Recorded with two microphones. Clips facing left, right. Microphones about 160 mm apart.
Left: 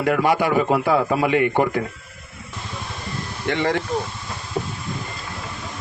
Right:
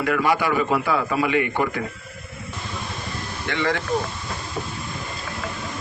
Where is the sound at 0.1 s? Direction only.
50° left (ahead or behind).